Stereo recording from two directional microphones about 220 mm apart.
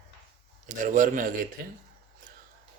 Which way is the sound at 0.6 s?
35° right (ahead or behind).